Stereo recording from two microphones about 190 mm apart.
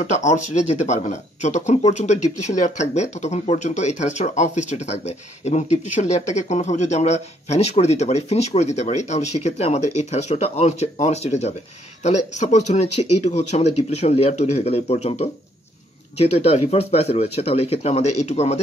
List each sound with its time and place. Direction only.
0.0 s speech: 40° left (ahead or behind)